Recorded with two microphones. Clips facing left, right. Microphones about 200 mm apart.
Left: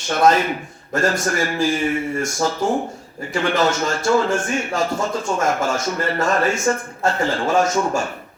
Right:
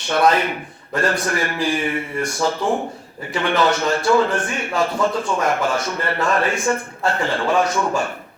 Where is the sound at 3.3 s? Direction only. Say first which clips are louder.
Even; 45° left (ahead or behind).